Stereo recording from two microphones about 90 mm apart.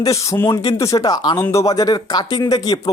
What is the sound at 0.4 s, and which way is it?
Speech, 45° left (ahead or behind).